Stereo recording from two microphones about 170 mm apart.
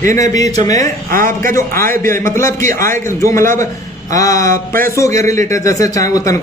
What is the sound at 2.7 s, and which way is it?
A man's voice, 15° left (ahead or behind).